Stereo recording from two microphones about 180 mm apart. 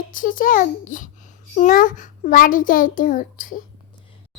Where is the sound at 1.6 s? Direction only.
45° left (ahead or behind).